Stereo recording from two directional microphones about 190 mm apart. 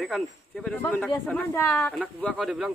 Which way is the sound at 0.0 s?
5° left (ahead or behind).